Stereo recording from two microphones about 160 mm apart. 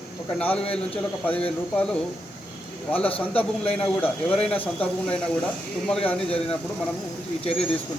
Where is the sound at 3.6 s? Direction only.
40° left (ahead or behind).